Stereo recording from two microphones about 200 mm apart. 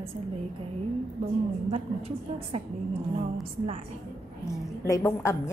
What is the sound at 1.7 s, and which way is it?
Speech, 30° right (ahead or behind).